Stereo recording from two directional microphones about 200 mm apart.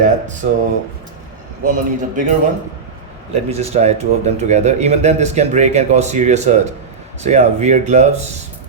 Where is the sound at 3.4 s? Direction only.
30° right (ahead or behind).